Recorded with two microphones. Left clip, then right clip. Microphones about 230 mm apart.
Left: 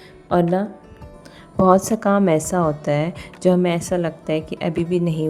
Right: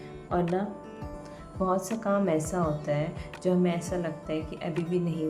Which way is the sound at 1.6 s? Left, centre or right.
Left.